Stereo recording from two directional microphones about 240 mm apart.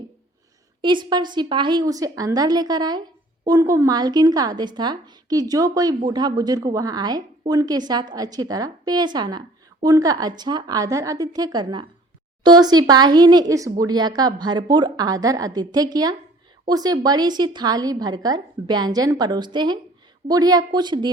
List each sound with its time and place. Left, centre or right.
0.8 s speech: centre